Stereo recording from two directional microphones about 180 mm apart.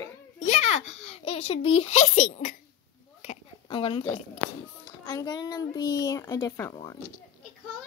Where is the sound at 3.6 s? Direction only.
30° left (ahead or behind).